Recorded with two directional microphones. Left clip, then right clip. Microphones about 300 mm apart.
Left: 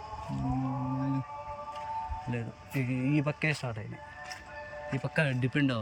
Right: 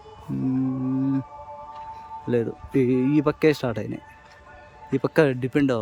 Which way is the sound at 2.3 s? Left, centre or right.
Centre.